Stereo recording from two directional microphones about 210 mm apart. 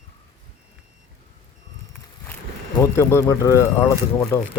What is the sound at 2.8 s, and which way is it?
Speech, 10° left (ahead or behind).